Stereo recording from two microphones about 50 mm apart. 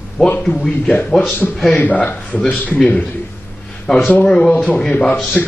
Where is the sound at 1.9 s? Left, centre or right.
Left.